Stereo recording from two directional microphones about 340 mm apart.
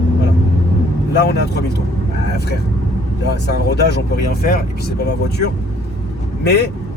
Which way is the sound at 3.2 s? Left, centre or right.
Left.